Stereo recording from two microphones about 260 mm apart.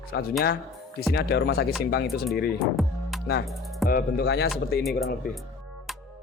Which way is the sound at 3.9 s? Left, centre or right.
Left.